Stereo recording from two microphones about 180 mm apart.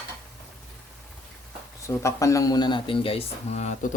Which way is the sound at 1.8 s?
15° left (ahead or behind).